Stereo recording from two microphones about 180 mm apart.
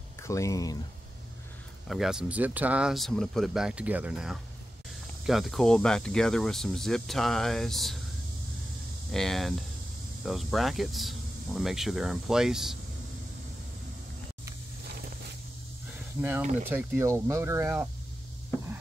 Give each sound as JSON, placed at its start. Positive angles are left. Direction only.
{"t": 0.2, "sound": "speech", "side_deg": 15}
{"t": 1.9, "sound": "speech", "side_deg": 0}
{"t": 9.1, "sound": "speech", "side_deg": 0}
{"t": 16.2, "sound": "speech", "side_deg": -10}